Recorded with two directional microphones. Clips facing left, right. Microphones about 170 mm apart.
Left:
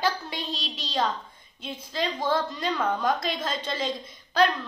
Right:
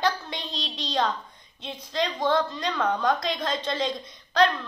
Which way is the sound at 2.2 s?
10° left (ahead or behind).